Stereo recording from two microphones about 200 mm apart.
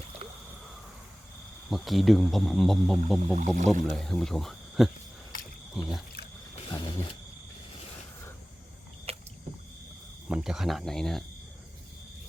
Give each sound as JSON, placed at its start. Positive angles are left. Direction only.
{"t": 1.7, "sound": "speech", "side_deg": 0}
{"t": 3.3, "sound": "speech", "side_deg": -40}
{"t": 3.9, "sound": "speech", "side_deg": 0}
{"t": 6.7, "sound": "a sound", "side_deg": 20}
{"t": 9.1, "sound": "rowboat", "side_deg": -30}
{"t": 10.2, "sound": "speech", "side_deg": -5}